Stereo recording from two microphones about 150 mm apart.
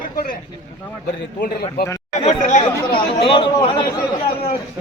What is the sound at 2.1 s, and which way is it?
Chatter, 50° left (ahead or behind).